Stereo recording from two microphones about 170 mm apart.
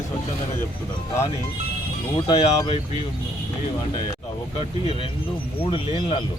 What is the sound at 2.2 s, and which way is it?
Speech, 35° left (ahead or behind).